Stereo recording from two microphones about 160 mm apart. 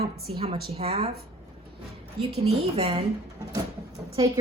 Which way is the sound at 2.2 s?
40° right (ahead or behind).